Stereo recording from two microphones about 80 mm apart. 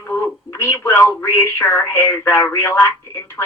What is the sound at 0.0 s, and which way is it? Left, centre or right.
Speech, left.